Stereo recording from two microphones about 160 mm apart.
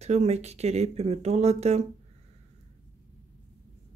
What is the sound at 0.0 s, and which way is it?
Speech, 40° right (ahead or behind).